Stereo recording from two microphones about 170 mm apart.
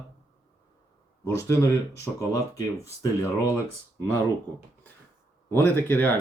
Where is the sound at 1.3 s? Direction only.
15° left (ahead or behind).